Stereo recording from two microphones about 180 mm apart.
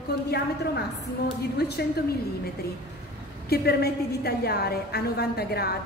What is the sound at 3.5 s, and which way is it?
A woman's voice, 60° left (ahead or behind).